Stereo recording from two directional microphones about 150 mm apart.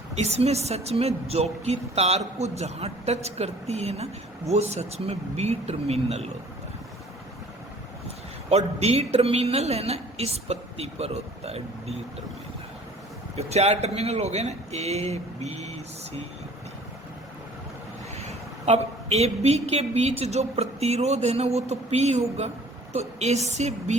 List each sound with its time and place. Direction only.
0.2 s a woman's voice: 45° right (ahead or behind)
8.0 s a woman's voice: 45° right (ahead or behind)
13.3 s a woman's voice: 45° right (ahead or behind)
18.3 s a woman's voice: 45° right (ahead or behind)